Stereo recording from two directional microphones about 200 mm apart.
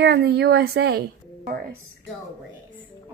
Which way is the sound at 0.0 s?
55° right (ahead or behind).